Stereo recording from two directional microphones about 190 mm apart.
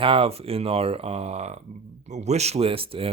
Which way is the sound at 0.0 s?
30° right (ahead or behind).